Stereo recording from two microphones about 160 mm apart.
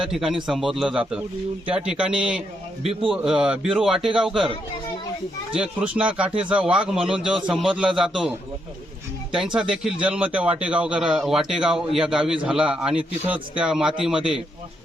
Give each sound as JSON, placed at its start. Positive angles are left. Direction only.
{"t": 0.1, "sound": "a man's voice", "side_deg": -5}
{"t": 5.5, "sound": "a man's voice", "side_deg": -5}
{"t": 9.6, "sound": "a man's voice", "side_deg": -5}